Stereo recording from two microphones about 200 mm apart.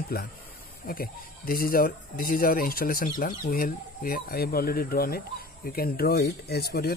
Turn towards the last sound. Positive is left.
turn(degrees=50)  # may be behind; listen again after turning